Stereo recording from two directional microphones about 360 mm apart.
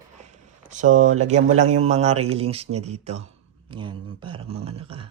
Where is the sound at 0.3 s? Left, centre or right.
Centre.